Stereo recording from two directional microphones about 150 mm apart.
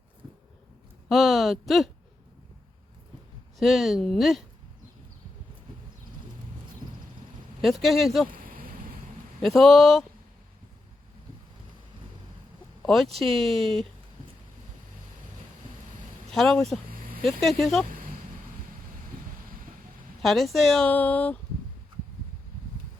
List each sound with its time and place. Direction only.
1.0 s speech: centre (ahead or behind)
3.6 s speech: centre (ahead or behind)
7.6 s speech: centre (ahead or behind)
8.3 s a sound: 70° right (ahead or behind)
9.4 s speech: centre (ahead or behind)
12.8 s speech: centre (ahead or behind)
16.3 s speech: centre (ahead or behind)
16.9 s a sound: 70° right (ahead or behind)
17.2 s speech: centre (ahead or behind)
17.8 s a sound: 70° right (ahead or behind)
20.2 s speech: centre (ahead or behind)